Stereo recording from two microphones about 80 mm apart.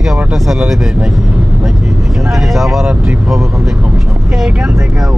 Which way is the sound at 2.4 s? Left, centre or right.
Centre.